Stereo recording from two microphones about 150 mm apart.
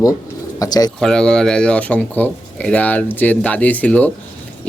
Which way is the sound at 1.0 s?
5° left (ahead or behind).